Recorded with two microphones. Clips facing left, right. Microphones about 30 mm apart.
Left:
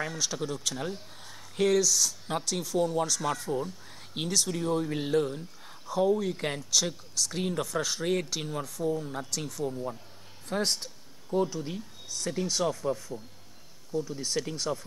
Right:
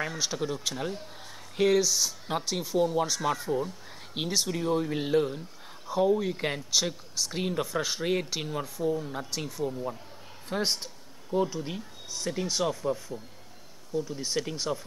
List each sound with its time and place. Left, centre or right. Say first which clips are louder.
0.0 s speech: right 1 dB; centre